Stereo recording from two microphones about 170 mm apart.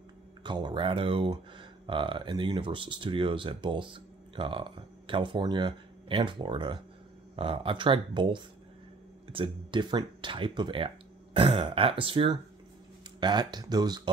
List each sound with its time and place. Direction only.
0.4 s speech: 25° right (ahead or behind)